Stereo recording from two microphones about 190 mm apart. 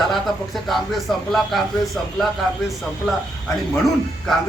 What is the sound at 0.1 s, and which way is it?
Speech, centre (ahead or behind).